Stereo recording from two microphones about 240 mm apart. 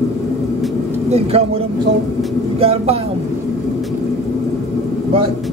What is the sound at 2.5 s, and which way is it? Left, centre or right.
Speech, right.